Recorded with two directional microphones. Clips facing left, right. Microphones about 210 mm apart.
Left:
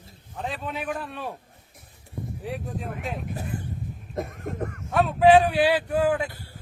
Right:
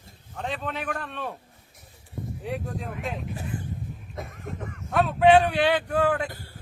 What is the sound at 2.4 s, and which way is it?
Speech, centre (ahead or behind).